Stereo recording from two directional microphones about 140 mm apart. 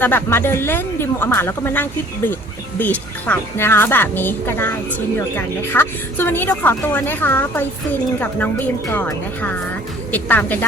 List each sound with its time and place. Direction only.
0.0 s speech: 15° left (ahead or behind)